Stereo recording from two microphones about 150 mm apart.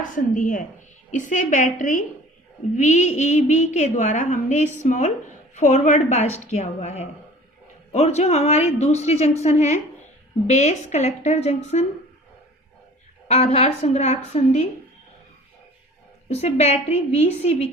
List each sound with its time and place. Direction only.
0.1 s a woman's voice: 60° left (ahead or behind)
13.2 s a woman's voice: 45° left (ahead or behind)
16.3 s a woman's voice: 45° left (ahead or behind)